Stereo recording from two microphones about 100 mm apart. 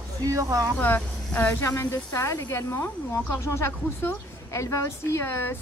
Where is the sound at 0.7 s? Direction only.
15° left (ahead or behind).